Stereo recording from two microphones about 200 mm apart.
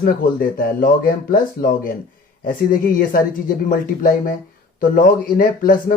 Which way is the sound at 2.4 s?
45° left (ahead or behind).